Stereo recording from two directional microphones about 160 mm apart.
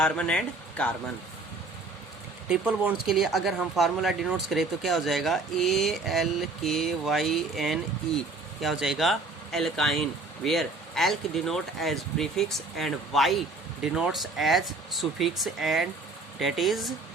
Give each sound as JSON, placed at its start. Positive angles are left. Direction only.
{"t": 0.0, "sound": "speech", "side_deg": 5}
{"t": 2.5, "sound": "speech", "side_deg": -5}